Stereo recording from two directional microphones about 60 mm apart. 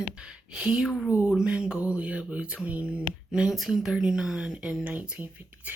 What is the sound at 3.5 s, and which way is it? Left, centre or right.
Speech, centre.